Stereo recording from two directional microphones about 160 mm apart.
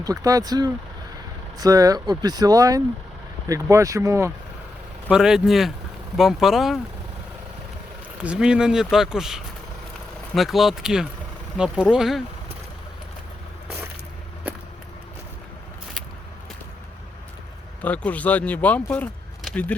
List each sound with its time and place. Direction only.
0.0 s speech: 20° right (ahead or behind)
5.1 s speech: 5° right (ahead or behind)
8.2 s speech: 5° right (ahead or behind)
17.8 s speech: 10° left (ahead or behind)